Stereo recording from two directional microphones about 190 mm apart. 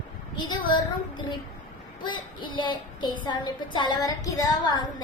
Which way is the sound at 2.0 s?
25° left (ahead or behind).